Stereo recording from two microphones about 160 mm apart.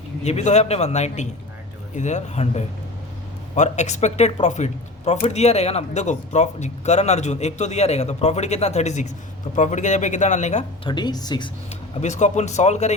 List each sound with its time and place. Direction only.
0.3 s speech: 45° left (ahead or behind)
10.8 s speech: 30° left (ahead or behind)
11.9 s speech: 45° left (ahead or behind)